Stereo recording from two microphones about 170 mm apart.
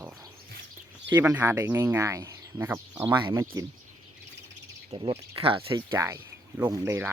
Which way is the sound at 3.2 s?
25° right (ahead or behind).